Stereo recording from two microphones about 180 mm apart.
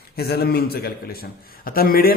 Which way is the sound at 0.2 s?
60° left (ahead or behind).